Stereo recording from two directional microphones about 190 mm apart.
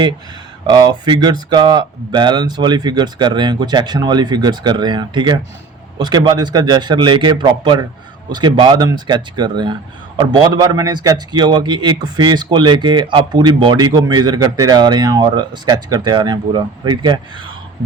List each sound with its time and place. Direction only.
0.7 s a man's voice: 20° right (ahead or behind)